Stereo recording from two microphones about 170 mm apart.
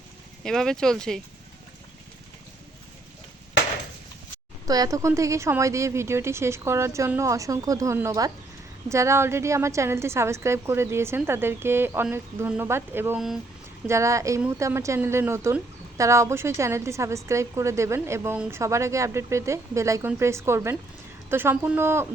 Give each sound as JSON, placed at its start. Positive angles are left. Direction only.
{"t": 0.4, "sound": "speech", "side_deg": 5}
{"t": 4.6, "sound": "speech", "side_deg": -20}
{"t": 13.1, "sound": "speech", "side_deg": 0}
{"t": 13.8, "sound": "speech", "side_deg": -15}